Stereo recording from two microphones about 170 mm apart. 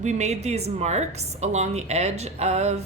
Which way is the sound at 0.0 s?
45° right (ahead or behind).